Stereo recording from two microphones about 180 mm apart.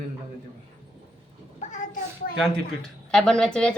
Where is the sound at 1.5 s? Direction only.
45° left (ahead or behind).